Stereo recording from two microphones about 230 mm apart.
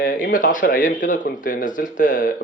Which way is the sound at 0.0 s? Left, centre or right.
Left.